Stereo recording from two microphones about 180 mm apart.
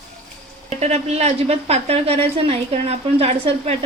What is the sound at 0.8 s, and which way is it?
A woman's voice, 40° right (ahead or behind).